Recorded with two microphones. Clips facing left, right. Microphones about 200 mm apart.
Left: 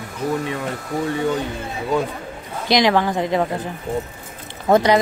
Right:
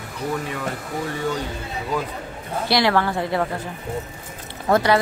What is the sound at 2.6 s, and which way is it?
Speech, 20° left (ahead or behind).